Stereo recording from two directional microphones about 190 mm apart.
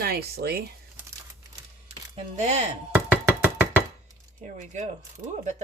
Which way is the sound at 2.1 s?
35° right (ahead or behind).